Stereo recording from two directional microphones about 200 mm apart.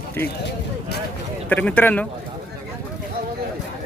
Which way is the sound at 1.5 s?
5° left (ahead or behind).